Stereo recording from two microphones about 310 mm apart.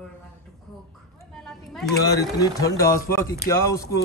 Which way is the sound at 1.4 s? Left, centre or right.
Centre.